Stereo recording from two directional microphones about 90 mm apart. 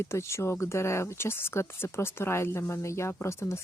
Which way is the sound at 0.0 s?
30° left (ahead or behind).